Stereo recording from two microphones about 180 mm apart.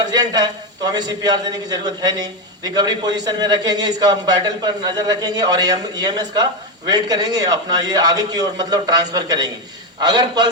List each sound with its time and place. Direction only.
0.0 s a man's voice: 20° right (ahead or behind)